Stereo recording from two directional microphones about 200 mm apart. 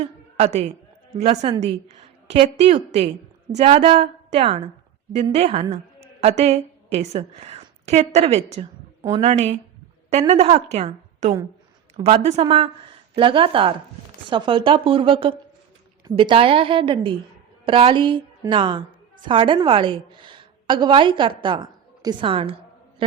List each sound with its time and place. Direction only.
0.0 s a woman's voice: 35° right (ahead or behind)